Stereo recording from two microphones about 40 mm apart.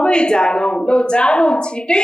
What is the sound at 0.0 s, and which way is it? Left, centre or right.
Speech, left.